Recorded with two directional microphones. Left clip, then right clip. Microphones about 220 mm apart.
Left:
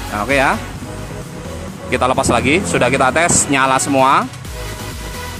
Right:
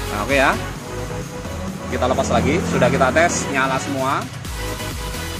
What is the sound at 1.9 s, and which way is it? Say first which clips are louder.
Speech: left 5 dB; 35° left (ahead or behind).